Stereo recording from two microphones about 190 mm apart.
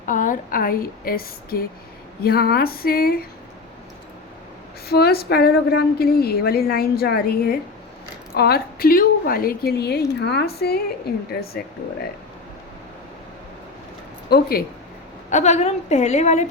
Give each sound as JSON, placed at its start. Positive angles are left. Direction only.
{"t": 0.0, "sound": "a woman's voice", "side_deg": 45}
{"t": 4.9, "sound": "a woman's voice", "side_deg": 55}
{"t": 14.3, "sound": "a woman's voice", "side_deg": 55}
{"t": 15.3, "sound": "a woman's voice", "side_deg": 40}